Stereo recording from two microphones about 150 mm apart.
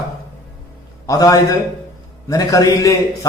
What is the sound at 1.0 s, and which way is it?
A man's voice, 20° left (ahead or behind).